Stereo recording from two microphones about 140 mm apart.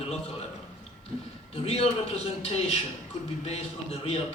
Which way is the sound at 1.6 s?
50° left (ahead or behind).